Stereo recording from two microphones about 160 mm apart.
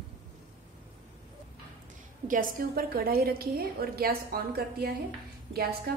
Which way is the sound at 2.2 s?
60° right (ahead or behind).